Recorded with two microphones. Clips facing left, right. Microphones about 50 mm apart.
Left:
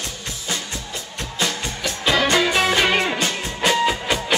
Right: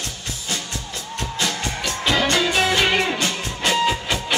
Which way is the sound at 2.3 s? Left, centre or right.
Centre.